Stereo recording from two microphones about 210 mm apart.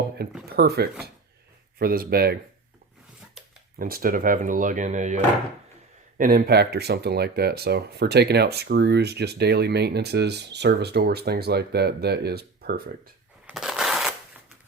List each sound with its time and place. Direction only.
0.4 s speech: 50° right (ahead or behind)
3.8 s speech: 45° right (ahead or behind)
13.5 s crushing: centre (ahead or behind)